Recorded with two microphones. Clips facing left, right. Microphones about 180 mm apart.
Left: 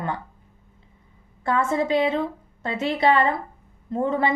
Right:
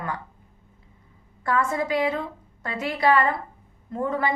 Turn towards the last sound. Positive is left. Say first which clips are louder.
# left 3 dB
turn(degrees=25)  # may be behind; listen again after turning